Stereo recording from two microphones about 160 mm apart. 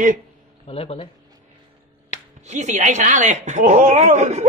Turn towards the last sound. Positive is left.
turn(degrees=-50)  # may be behind; listen again after turning